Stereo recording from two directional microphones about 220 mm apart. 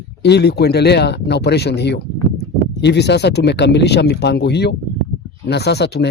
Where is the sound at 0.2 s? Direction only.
50° left (ahead or behind).